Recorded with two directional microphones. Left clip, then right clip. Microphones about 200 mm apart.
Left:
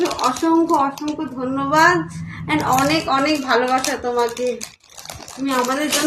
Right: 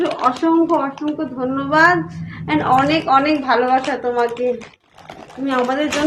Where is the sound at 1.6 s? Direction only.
20° left (ahead or behind).